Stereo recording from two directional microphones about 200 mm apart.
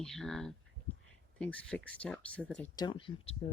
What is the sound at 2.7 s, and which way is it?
Speech, 25° left (ahead or behind).